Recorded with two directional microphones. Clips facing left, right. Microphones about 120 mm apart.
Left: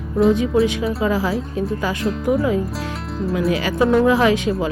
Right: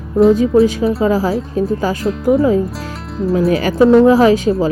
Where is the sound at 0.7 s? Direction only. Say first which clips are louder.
Right 6 dB; 35° right (ahead or behind).